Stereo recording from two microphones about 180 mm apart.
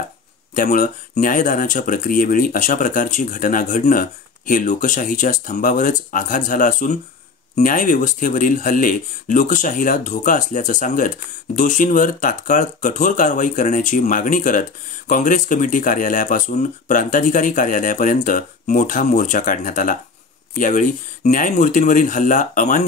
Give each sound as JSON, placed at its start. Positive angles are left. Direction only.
{"t": 0.6, "sound": "speech", "side_deg": 45}